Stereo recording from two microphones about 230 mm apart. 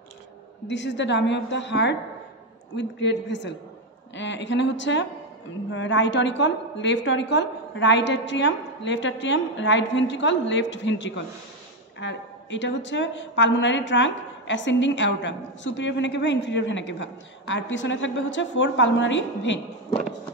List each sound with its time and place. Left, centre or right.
0.7 s a woman's voice: left